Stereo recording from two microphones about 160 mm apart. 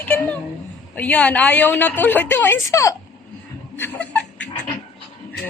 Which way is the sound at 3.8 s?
10° left (ahead or behind).